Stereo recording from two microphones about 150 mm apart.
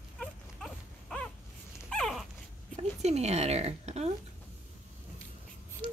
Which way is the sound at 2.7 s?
45° right (ahead or behind).